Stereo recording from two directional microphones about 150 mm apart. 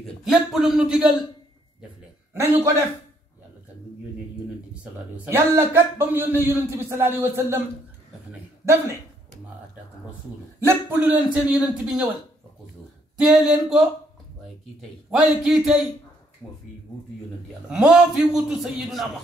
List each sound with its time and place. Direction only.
0.0 s a man's voice: centre (ahead or behind)
2.3 s a man's voice: 20° right (ahead or behind)
5.1 s speech: 15° right (ahead or behind)
8.3 s a sound: 15° right (ahead or behind)
10.7 s speech: 10° right (ahead or behind)
13.2 s a man's voice: 5° right (ahead or behind)
17.6 s a man's voice: 5° right (ahead or behind)